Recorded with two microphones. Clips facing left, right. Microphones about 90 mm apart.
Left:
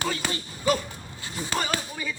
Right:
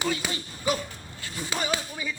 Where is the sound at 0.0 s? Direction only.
10° right (ahead or behind).